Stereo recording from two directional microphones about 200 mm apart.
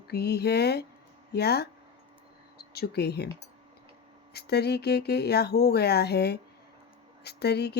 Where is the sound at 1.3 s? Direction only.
55° left (ahead or behind).